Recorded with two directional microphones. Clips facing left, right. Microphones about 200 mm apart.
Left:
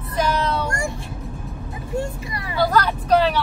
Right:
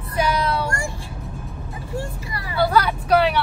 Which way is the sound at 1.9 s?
20° left (ahead or behind).